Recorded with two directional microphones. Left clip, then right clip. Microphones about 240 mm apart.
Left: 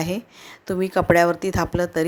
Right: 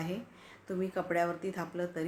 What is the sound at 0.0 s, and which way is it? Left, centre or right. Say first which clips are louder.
A woman's voice: left 12 dB; left.